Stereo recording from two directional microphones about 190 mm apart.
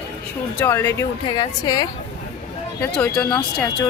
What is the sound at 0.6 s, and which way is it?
Speech, 15° left (ahead or behind).